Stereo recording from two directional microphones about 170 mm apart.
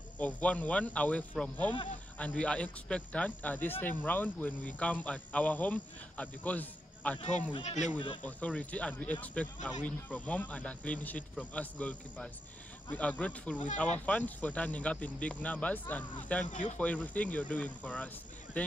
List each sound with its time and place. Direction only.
0.2 s a man's voice: 10° left (ahead or behind)
7.2 s speech: 45° left (ahead or behind)
8.2 s a man's voice: 10° left (ahead or behind)